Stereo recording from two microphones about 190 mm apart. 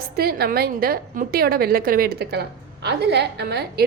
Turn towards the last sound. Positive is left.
turn(degrees=-60)  # may be behind; listen again after turning